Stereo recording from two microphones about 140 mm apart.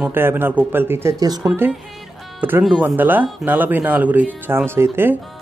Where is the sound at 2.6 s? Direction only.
5° right (ahead or behind).